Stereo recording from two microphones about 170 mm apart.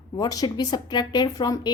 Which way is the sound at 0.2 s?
25° left (ahead or behind).